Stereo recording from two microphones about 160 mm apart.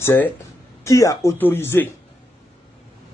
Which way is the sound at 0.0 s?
15° left (ahead or behind).